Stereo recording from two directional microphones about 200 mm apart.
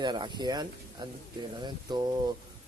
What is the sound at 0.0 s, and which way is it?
Speech, 20° right (ahead or behind).